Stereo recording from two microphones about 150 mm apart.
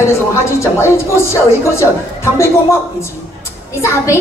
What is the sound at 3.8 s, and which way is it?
Speech, 20° left (ahead or behind).